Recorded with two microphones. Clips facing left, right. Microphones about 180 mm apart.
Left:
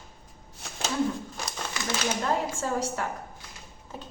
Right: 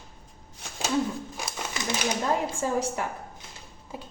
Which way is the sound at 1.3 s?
10° right (ahead or behind).